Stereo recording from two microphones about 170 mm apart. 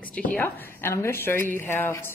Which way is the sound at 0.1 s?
10° left (ahead or behind).